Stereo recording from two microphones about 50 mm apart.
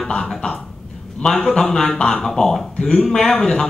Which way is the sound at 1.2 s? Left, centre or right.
Centre.